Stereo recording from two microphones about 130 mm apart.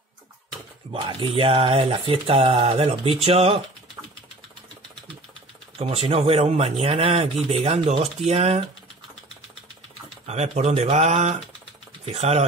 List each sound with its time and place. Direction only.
0.9 s speech: 40° right (ahead or behind)
5.8 s speech: 50° right (ahead or behind)
10.2 s speech: 60° right (ahead or behind)